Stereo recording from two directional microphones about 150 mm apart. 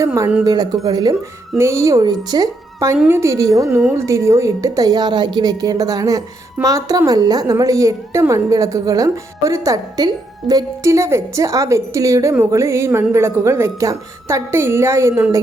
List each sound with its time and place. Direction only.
0.0 s a woman's voice: 15° right (ahead or behind)
0.4 s a woman's voice: 25° right (ahead or behind)